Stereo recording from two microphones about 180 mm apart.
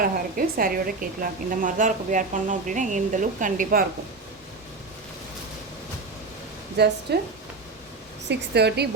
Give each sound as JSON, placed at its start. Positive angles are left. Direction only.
{"t": 0.0, "sound": "a woman's voice", "side_deg": -50}
{"t": 6.8, "sound": "a woman's voice", "side_deg": -65}
{"t": 8.3, "sound": "a woman's voice", "side_deg": -65}